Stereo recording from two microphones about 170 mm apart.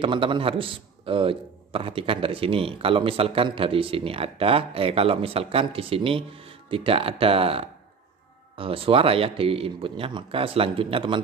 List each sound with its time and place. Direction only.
0.0 s a man's voice: 30° right (ahead or behind)